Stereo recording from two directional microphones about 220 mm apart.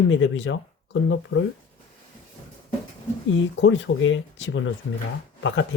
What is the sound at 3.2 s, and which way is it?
Speech, 60° left (ahead or behind).